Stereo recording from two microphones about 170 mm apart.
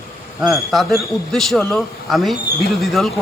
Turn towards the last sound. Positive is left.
turn(degrees=0)  # may be behind; listen again after turning